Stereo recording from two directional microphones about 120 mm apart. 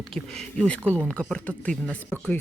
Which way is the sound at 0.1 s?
5° left (ahead or behind).